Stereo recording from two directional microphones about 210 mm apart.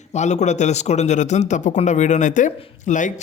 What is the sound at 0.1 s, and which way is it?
A man's voice, 35° left (ahead or behind).